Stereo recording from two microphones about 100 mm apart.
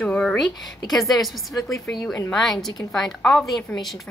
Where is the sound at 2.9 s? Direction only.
5° left (ahead or behind).